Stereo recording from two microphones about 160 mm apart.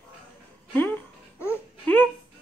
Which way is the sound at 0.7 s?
10° left (ahead or behind).